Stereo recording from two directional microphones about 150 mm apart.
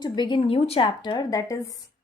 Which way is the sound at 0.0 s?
30° left (ahead or behind).